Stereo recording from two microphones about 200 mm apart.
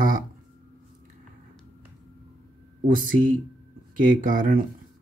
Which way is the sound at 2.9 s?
45° right (ahead or behind).